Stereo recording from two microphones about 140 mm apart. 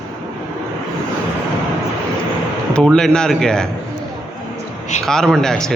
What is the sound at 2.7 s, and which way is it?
Speech, 5° left (ahead or behind).